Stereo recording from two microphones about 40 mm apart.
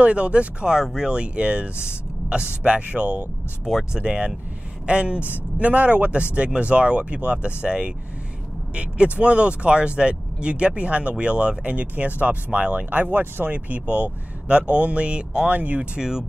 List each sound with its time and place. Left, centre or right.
0.0 s speech: right
0.7 s speech: centre
1.1 s speech: right
3.6 s speech: centre
4.0 s speech: right
5.2 s speech: right
13.0 s speech: right
15.5 s speech: right
16.0 s speech: centre